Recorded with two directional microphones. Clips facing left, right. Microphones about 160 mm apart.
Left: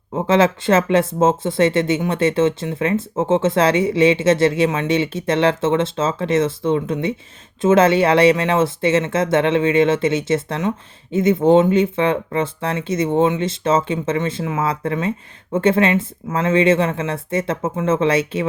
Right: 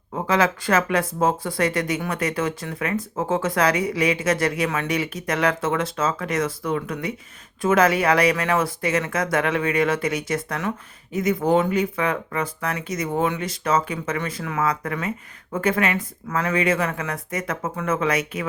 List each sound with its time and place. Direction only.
0.1 s speech: 25° left (ahead or behind)